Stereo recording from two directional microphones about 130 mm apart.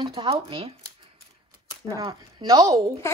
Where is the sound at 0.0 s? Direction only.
40° right (ahead or behind).